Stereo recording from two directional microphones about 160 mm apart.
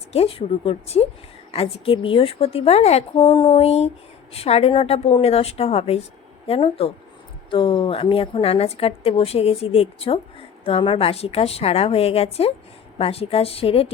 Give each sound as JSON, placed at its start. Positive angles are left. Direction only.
{"t": 0.1, "sound": "a woman's voice", "side_deg": 35}